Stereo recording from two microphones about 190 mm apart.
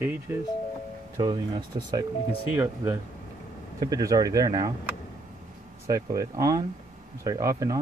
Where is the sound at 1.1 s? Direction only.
20° right (ahead or behind).